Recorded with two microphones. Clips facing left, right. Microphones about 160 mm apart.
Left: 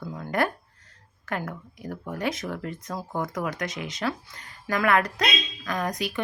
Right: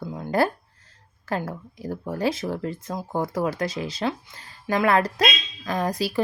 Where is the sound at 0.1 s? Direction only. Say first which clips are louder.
Right 4 dB; 25° right (ahead or behind).